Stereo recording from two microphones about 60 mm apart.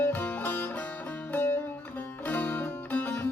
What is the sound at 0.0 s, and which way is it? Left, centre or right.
Music, left.